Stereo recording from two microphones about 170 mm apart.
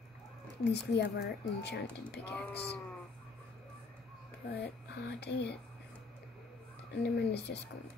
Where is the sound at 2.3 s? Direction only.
5° left (ahead or behind).